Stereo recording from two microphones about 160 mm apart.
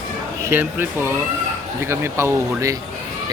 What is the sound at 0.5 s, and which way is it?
A man's voice, 10° right (ahead or behind).